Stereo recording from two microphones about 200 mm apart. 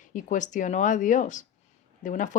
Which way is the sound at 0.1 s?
40° left (ahead or behind).